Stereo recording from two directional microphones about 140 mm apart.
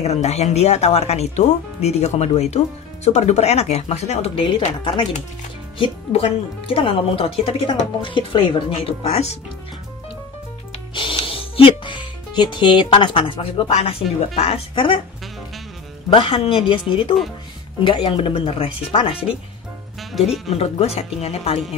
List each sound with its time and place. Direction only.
0.0 s speech: 50° left (ahead or behind)
5.8 s speech: 45° left (ahead or behind)
11.0 s speech: 40° left (ahead or behind)
16.1 s speech: 35° left (ahead or behind)
20.0 s music: centre (ahead or behind)
20.4 s speech: 45° left (ahead or behind)